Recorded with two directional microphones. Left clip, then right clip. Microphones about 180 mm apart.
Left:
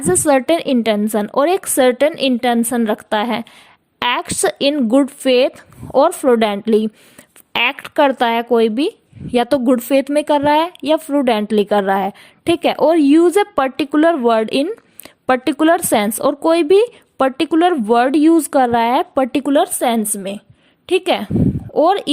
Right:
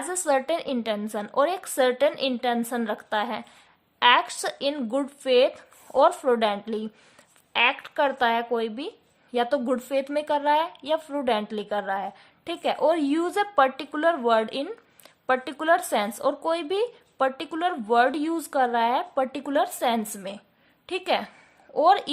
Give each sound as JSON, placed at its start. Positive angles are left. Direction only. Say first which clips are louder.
{"t": 0.1, "sound": "a woman's voice", "louder": "left 11 dB", "side_deg": 40}